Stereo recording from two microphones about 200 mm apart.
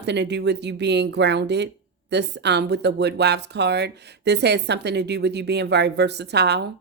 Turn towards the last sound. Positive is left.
turn(degrees=-55)  # may be behind; listen again after turning